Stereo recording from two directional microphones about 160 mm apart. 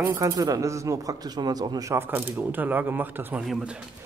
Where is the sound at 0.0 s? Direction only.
15° right (ahead or behind).